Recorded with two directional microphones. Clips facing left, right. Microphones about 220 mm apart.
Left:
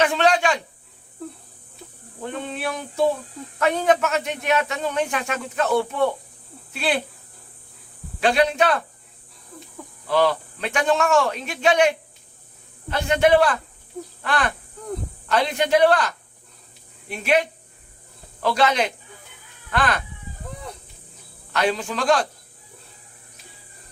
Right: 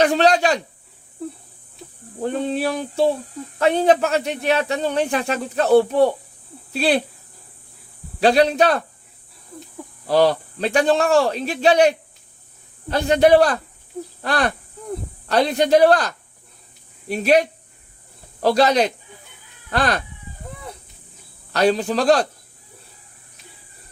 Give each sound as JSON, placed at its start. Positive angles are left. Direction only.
{"t": 0.0, "sound": "speech", "side_deg": -40}
{"t": 2.2, "sound": "speech", "side_deg": -35}
{"t": 8.2, "sound": "speech", "side_deg": -35}
{"t": 10.1, "sound": "speech", "side_deg": -35}
{"t": 21.5, "sound": "speech", "side_deg": -35}